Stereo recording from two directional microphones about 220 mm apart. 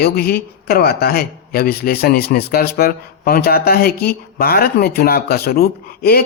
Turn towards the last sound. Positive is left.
turn(degrees=45)  # may be behind; listen again after turning